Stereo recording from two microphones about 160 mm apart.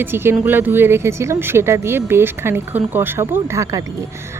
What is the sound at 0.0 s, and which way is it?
Speech, 15° right (ahead or behind).